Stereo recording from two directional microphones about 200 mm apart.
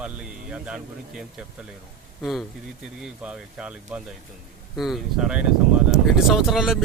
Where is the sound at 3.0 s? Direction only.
5° right (ahead or behind).